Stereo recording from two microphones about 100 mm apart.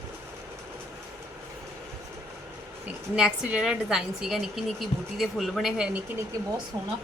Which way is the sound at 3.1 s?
10° right (ahead or behind).